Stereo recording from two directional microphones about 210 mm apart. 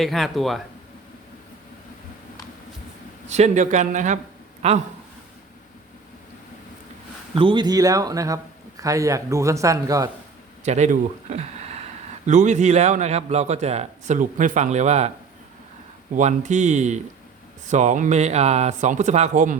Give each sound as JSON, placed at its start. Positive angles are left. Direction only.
{"t": 0.0, "sound": "speech", "side_deg": 0}
{"t": 3.2, "sound": "a man's voice", "side_deg": -35}
{"t": 7.3, "sound": "speech", "side_deg": -25}
{"t": 10.6, "sound": "a man's voice", "side_deg": -35}
{"t": 16.1, "sound": "a man's voice", "side_deg": -35}